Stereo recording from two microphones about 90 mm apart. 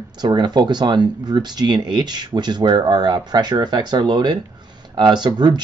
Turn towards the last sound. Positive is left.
turn(degrees=-55)  # may be behind; listen again after turning